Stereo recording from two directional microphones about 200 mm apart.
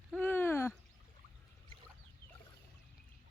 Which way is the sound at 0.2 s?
10° left (ahead or behind).